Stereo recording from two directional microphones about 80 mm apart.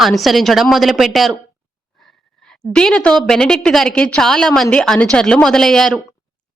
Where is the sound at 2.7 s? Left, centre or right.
Centre.